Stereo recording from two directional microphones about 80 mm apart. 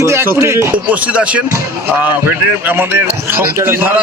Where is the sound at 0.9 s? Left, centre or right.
Centre.